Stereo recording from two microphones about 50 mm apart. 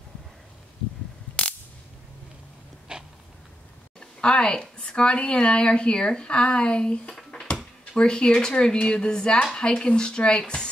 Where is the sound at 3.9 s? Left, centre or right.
Centre.